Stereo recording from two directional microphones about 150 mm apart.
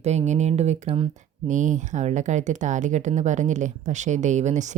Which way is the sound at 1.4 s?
55° right (ahead or behind).